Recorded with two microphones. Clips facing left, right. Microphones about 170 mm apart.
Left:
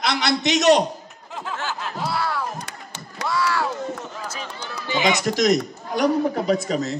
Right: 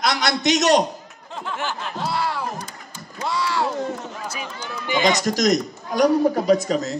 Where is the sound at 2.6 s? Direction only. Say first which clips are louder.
Left 1 dB; 75° left (ahead or behind).